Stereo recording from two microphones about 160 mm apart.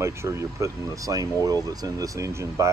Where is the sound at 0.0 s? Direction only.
15° right (ahead or behind).